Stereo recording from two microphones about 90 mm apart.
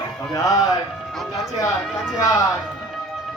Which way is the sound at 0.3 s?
40° left (ahead or behind).